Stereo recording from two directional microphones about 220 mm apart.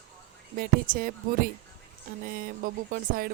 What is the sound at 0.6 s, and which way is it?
Speech, 40° right (ahead or behind).